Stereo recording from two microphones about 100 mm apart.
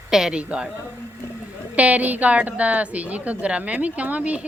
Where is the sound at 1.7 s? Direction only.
15° right (ahead or behind).